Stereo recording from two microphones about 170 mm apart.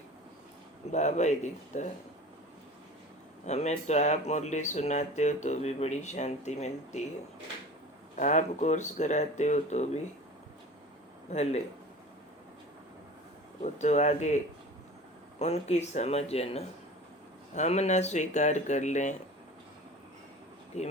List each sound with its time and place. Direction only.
0.9 s speech: 40° left (ahead or behind)
3.4 s speech: 40° left (ahead or behind)
8.2 s speech: 45° left (ahead or behind)
11.3 s speech: 40° left (ahead or behind)
13.6 s speech: 40° left (ahead or behind)
20.7 s speech: 40° left (ahead or behind)